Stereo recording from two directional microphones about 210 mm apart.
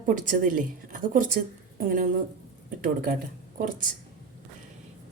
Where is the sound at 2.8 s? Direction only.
45° right (ahead or behind).